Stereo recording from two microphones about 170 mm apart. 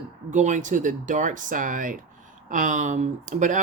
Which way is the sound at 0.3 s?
45° right (ahead or behind).